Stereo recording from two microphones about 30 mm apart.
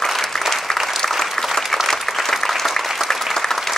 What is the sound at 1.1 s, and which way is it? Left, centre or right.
Applause, centre.